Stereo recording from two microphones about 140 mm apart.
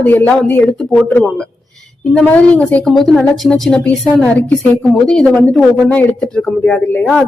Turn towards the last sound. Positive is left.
turn(degrees=5)  # may be behind; listen again after turning